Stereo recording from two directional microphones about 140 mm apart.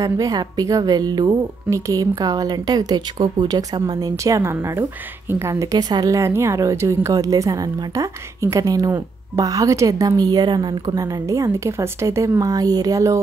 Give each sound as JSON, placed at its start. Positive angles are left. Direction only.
{"t": 0.0, "sound": "speech", "side_deg": -25}